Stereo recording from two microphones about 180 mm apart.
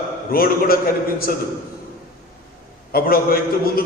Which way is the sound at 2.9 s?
55° left (ahead or behind).